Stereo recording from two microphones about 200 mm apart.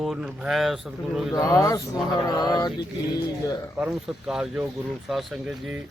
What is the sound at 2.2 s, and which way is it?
Mantra, 20° left (ahead or behind).